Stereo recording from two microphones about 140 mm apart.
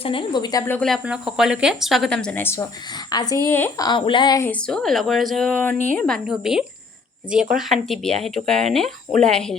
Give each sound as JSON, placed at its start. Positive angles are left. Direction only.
{"t": 0.0, "sound": "speech", "side_deg": 40}
{"t": 0.8, "sound": "speech", "side_deg": 5}
{"t": 3.1, "sound": "a woman's voice", "side_deg": 30}
{"t": 3.8, "sound": "speech", "side_deg": 30}
{"t": 4.6, "sound": "speech", "side_deg": 5}
{"t": 5.7, "sound": "speech", "side_deg": -65}
{"t": 6.0, "sound": "speech", "side_deg": 5}